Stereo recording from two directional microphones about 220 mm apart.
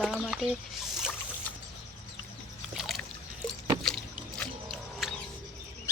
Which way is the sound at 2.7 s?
5° right (ahead or behind).